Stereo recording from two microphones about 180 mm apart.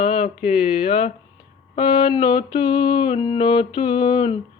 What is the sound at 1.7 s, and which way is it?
Mantra, 30° left (ahead or behind).